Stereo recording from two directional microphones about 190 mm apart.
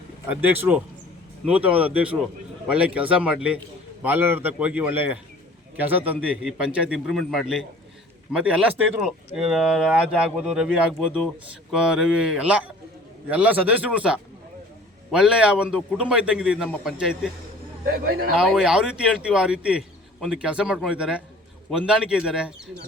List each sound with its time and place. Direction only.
1.5 s a man's voice: 5° right (ahead or behind)
17.8 s speech: 50° right (ahead or behind)
18.3 s speech: 5° right (ahead or behind)